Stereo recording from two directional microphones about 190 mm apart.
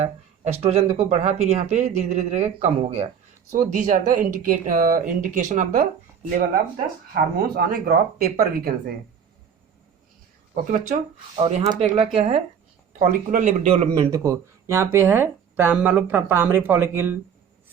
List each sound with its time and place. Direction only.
0.0 s speech: 35° right (ahead or behind)
3.5 s speech: 45° right (ahead or behind)
10.5 s speech: 40° right (ahead or behind)
14.1 s speech: 15° right (ahead or behind)